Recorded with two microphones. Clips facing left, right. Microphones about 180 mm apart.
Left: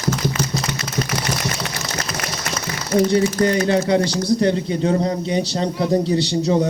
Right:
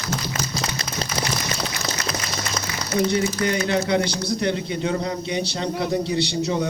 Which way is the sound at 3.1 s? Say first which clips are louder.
Left 5 dB; 35° left (ahead or behind).